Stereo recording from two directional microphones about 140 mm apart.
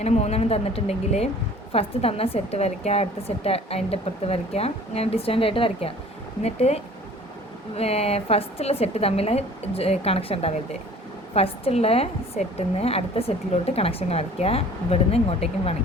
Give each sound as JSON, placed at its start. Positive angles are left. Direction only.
{"t": 0.0, "sound": "a woman's voice", "side_deg": 50}
{"t": 7.8, "sound": "a woman's voice", "side_deg": 45}